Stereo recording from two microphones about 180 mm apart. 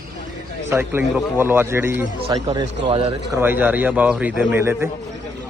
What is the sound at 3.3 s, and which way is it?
Speech, 10° right (ahead or behind).